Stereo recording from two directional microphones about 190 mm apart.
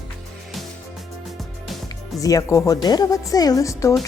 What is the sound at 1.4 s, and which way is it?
Music, centre (ahead or behind).